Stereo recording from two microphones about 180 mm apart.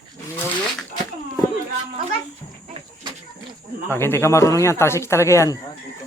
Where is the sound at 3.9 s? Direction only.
15° left (ahead or behind).